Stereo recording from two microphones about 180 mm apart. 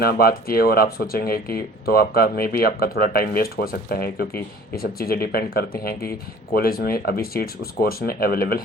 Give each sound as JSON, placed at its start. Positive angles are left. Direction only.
{"t": 0.0, "sound": "speech", "side_deg": 55}